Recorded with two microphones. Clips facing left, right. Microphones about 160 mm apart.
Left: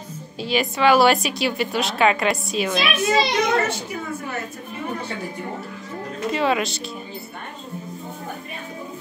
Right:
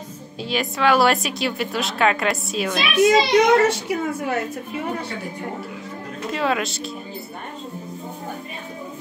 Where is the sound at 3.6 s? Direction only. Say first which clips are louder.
Right 6 dB; 80° right.